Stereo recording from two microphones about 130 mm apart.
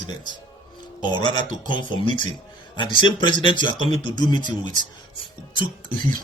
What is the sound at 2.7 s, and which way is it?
A man's voice, 35° left (ahead or behind).